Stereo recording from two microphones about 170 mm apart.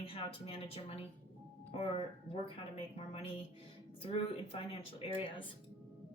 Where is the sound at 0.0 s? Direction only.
35° left (ahead or behind).